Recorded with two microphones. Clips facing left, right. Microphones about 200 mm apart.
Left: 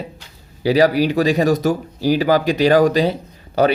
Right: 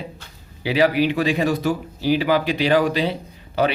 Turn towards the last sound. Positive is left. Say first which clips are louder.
# left 5 dB
turn(degrees=40)  # may be behind; listen again after turning